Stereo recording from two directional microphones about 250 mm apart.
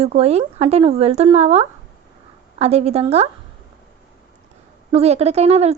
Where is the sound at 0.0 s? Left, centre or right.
Right.